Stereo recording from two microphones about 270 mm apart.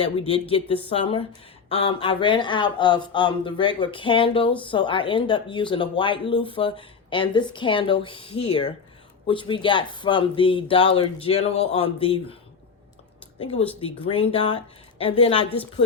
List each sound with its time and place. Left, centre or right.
0.3 s speech: centre
13.4 s speech: centre